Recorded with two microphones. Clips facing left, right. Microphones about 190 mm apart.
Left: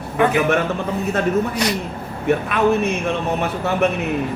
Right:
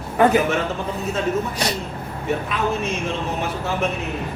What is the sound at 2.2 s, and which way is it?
Speech, 60° left (ahead or behind).